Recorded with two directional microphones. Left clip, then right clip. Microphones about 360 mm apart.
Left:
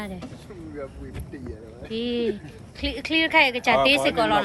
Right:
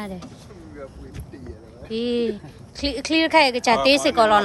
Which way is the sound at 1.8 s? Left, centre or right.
Centre.